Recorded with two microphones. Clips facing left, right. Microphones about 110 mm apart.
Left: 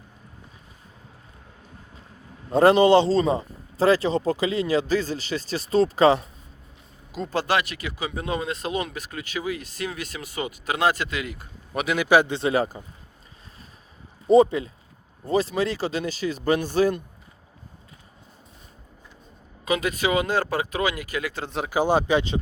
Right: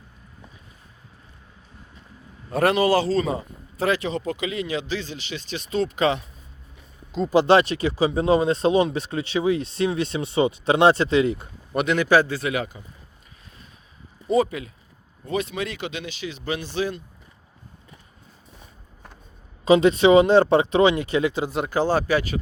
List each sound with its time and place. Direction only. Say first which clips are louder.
2.5 s a man's voice: left 4 dB; 30° left (ahead or behind)
7.4 s speech: right 8 dB; 30° right (ahead or behind)
11.7 s a man's voice: right 3 dB; centre (ahead or behind)
11.9 s a man's voice: left 1 dB; 15° left (ahead or behind)
12.4 s a man's voice: left 4 dB; 35° left (ahead or behind)
14.3 s a man's voice: left 5 dB; 30° left (ahead or behind); by 17.0 s 45° left (ahead or behind)
19.6 s speech: right 9 dB; 25° right (ahead or behind)
21.4 s speech: right 4 dB; centre (ahead or behind)
21.7 s speech: left 2 dB; 15° left (ahead or behind)